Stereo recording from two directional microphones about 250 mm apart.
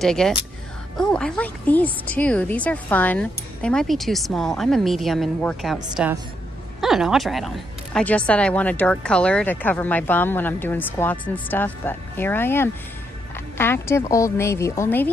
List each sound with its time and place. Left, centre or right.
0.0 s a woman's voice: centre